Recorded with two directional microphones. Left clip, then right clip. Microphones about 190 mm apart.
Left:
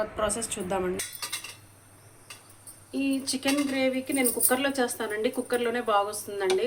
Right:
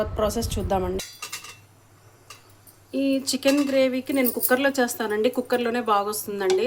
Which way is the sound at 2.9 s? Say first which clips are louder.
Right 5 dB; 35° right (ahead or behind).